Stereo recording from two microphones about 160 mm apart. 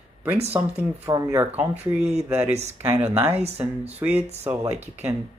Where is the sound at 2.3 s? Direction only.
10° right (ahead or behind).